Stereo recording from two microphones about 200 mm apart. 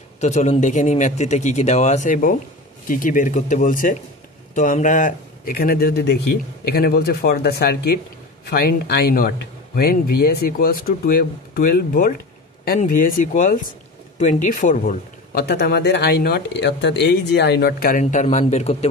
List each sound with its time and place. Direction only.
0.2 s a man's voice: 35° left (ahead or behind)